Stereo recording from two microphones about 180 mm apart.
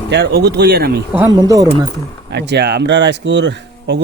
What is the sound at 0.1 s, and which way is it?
Speech, 65° right (ahead or behind).